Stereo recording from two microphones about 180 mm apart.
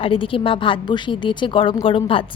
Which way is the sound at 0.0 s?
30° left (ahead or behind).